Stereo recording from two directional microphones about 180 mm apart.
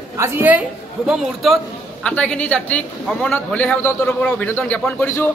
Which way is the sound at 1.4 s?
Centre (ahead or behind).